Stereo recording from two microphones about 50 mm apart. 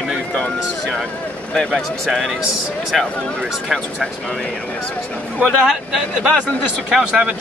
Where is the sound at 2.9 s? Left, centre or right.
Centre.